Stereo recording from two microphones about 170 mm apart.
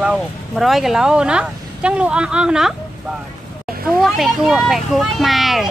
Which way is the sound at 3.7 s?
60° right (ahead or behind).